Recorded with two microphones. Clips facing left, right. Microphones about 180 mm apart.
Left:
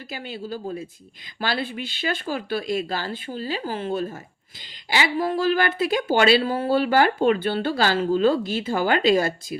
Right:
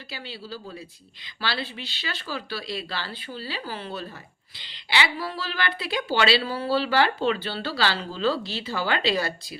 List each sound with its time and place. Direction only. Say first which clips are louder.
0.1 s speech: left 6 dB; 50° left (ahead or behind)